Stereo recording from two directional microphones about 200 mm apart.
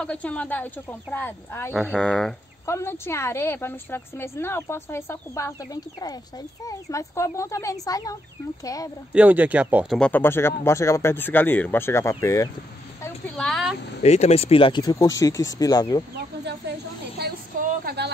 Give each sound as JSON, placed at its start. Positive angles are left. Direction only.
{"t": 0.0, "sound": "a woman's voice", "side_deg": 5}
{"t": 9.1, "sound": "speech", "side_deg": -10}
{"t": 9.9, "sound": "a woman's voice", "side_deg": 5}
{"t": 13.0, "sound": "a woman's voice", "side_deg": 5}
{"t": 14.0, "sound": "speech", "side_deg": 35}
{"t": 17.2, "sound": "a sound", "side_deg": -45}